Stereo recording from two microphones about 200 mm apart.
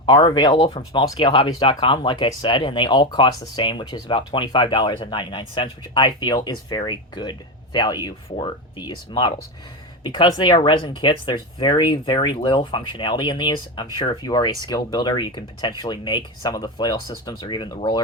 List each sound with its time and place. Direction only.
0.0 s speech: 25° left (ahead or behind)